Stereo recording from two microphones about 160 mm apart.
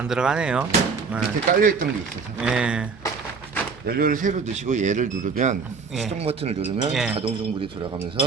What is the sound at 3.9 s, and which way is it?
Speech, 65° right (ahead or behind).